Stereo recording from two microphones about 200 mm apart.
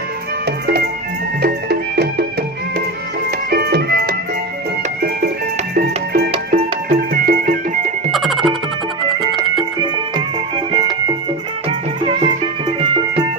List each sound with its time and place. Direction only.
0.5 s music: 55° right (ahead or behind)
3.4 s music: 50° right (ahead or behind)
5.8 s music: 50° right (ahead or behind)
8.1 s music: centre (ahead or behind)